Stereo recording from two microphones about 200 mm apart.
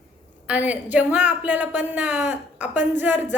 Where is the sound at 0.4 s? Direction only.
5° right (ahead or behind).